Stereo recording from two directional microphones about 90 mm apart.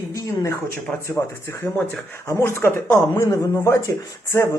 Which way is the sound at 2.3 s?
30° left (ahead or behind).